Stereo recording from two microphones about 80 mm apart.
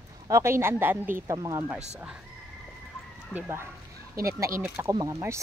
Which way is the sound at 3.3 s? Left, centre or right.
Left.